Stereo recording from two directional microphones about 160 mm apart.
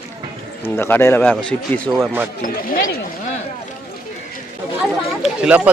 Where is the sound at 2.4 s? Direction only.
60° left (ahead or behind).